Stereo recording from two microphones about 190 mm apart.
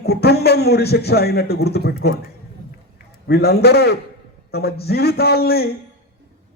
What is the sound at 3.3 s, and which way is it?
Speech, 60° left (ahead or behind).